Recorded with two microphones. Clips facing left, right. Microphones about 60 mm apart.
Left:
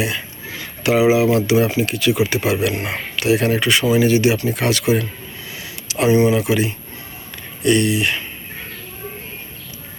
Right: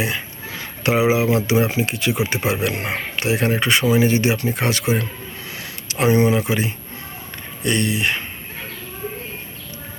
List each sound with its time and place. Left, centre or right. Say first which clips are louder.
0.6 s speech: left 3 dB; right
5.5 s a sound: even; right
7.6 s speech: left 4 dB; right